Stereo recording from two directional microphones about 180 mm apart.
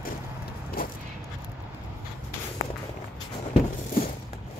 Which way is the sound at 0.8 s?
55° left (ahead or behind).